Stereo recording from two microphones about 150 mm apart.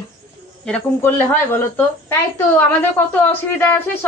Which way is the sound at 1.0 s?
15° left (ahead or behind).